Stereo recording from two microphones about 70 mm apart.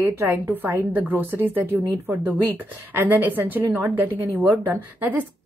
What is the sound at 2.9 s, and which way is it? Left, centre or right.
A woman's voice, right.